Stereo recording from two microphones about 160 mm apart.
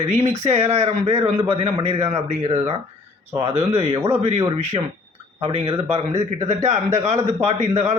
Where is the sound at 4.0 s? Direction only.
15° right (ahead or behind).